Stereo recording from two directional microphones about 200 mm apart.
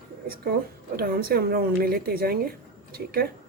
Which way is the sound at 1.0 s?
50° right (ahead or behind).